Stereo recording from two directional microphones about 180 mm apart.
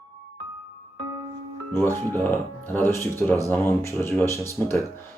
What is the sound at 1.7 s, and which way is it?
Speech, 15° left (ahead or behind).